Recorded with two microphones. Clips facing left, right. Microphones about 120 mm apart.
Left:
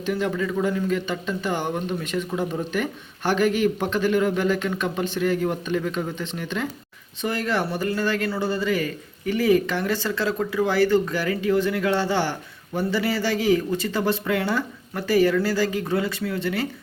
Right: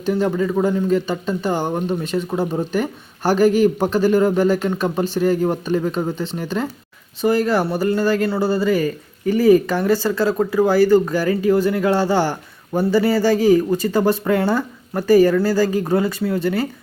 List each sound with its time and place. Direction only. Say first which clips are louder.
0.0 s speech: right 6 dB; 35° right (ahead or behind)